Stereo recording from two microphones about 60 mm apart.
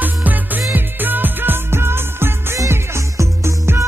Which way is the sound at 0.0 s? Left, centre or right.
Right.